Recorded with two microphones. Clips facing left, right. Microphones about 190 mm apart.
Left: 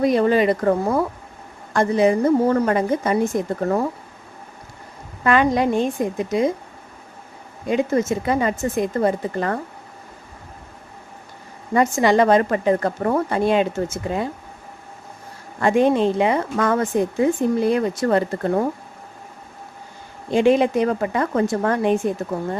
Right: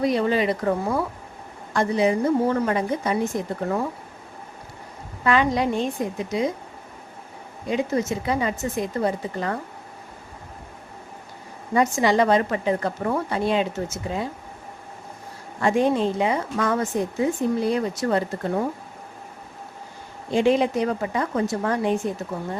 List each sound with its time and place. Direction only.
0.0 s speech: 50° left (ahead or behind)
5.2 s speech: 50° left (ahead or behind)
7.7 s speech: 50° left (ahead or behind)
11.7 s speech: 50° left (ahead or behind)
15.6 s a woman's voice: 60° left (ahead or behind)
20.3 s a woman's voice: 55° left (ahead or behind)